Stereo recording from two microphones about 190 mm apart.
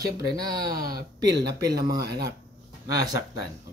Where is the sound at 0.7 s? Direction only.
50° right (ahead or behind).